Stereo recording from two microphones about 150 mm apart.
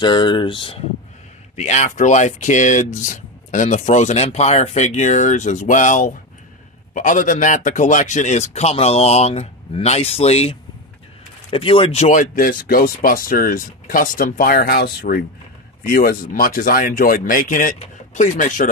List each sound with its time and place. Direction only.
0.0 s speech: 30° left (ahead or behind)
1.6 s speech: 55° left (ahead or behind)
12.1 s speech: 65° left (ahead or behind); by 15.2 s 85° left
15.8 s speech: 70° left (ahead or behind)